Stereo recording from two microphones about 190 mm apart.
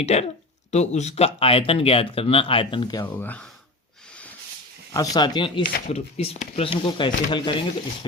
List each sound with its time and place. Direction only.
0.0 s speech: 35° left (ahead or behind)
3.2 s speech: 10° left (ahead or behind)
4.9 s speech: 20° left (ahead or behind)
5.9 s speech: 35° left (ahead or behind)